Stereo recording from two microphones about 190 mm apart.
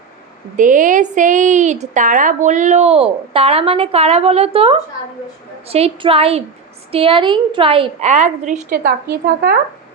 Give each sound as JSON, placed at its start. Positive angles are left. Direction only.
{"t": 0.5, "sound": "a woman's voice", "side_deg": -45}